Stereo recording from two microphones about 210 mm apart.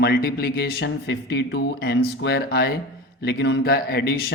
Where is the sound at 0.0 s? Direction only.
45° left (ahead or behind).